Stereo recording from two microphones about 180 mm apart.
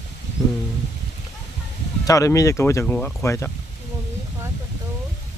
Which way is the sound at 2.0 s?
15° left (ahead or behind).